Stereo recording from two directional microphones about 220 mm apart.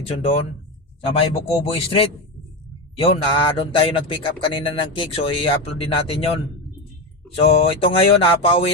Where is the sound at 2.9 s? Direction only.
25° left (ahead or behind).